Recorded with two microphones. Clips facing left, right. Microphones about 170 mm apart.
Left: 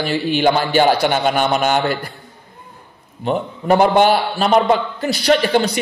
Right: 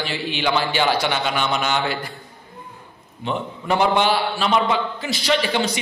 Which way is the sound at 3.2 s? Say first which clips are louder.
Left 6 dB; 45° left (ahead or behind).